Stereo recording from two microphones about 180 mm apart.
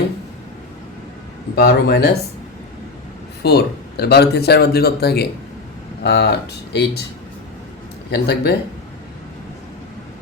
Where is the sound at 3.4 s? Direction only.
65° left (ahead or behind).